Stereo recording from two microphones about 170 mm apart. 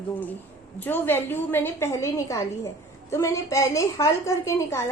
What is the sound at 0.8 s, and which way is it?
A woman's voice, 10° left (ahead or behind).